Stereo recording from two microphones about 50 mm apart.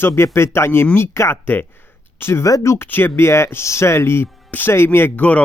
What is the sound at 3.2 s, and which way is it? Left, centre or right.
Speech, left.